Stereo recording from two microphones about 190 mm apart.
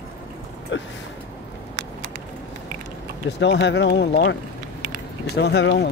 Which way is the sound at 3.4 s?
65° left (ahead or behind).